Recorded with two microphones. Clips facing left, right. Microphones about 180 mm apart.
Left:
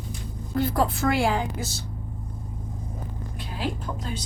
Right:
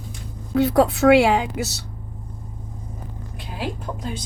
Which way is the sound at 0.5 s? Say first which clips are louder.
Right 7 dB; 75° right (ahead or behind).